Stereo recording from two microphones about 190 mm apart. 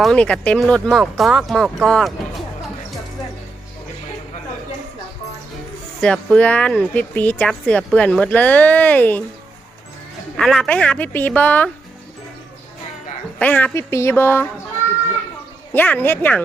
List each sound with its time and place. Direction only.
0.0 s speech: 5° left (ahead or behind)
6.0 s speech: 5° left (ahead or behind)
10.3 s speech: centre (ahead or behind)
13.4 s speech: 10° left (ahead or behind)
15.7 s speech: 10° left (ahead or behind)